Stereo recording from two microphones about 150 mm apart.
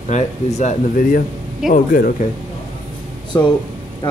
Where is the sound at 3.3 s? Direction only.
25° left (ahead or behind).